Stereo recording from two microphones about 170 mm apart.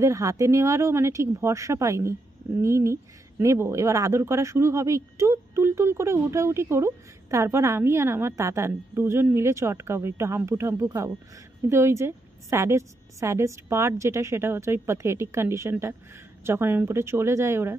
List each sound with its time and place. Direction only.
0.0 s speech: 20° right (ahead or behind)